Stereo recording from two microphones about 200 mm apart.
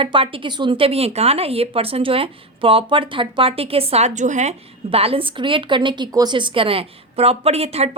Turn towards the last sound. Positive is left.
turn(degrees=-30)  # may be behind; listen again after turning